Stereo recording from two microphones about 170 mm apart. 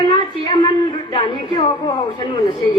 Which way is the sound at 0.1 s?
30° left (ahead or behind).